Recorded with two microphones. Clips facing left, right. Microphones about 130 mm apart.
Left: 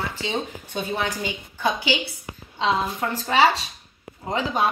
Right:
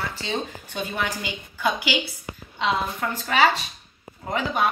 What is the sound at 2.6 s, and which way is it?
A woman's voice, 25° left (ahead or behind).